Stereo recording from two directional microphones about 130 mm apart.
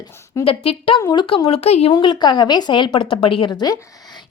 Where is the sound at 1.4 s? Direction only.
50° left (ahead or behind).